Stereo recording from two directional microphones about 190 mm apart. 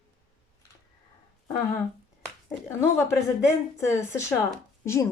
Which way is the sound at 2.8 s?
15° left (ahead or behind).